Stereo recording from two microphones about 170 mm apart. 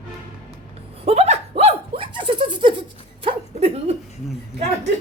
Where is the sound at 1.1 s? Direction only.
35° right (ahead or behind).